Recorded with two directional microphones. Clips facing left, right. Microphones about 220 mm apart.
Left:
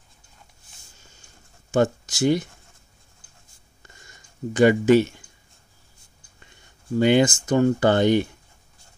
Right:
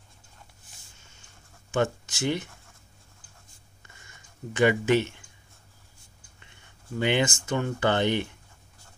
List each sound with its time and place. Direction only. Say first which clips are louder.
1.7 s speech: left 6 dB; 40° left (ahead or behind)
3.8 s a sound: left 3 dB; 40° left (ahead or behind)
7.0 s speech: left 8 dB; 40° left (ahead or behind)